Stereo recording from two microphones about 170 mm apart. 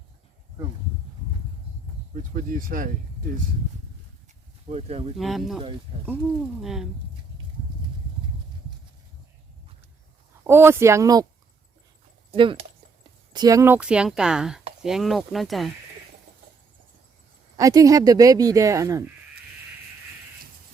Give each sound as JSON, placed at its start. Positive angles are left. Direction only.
{"t": 2.1, "sound": "speech", "side_deg": -50}
{"t": 4.7, "sound": "speech", "side_deg": -35}
{"t": 5.1, "sound": "speech", "side_deg": 0}
{"t": 5.9, "sound": "speech", "side_deg": -30}
{"t": 6.6, "sound": "speech", "side_deg": 0}
{"t": 10.4, "sound": "speech", "side_deg": -15}
{"t": 12.3, "sound": "speech", "side_deg": -30}
{"t": 13.3, "sound": "speech", "side_deg": -20}
{"t": 17.6, "sound": "speech", "side_deg": -20}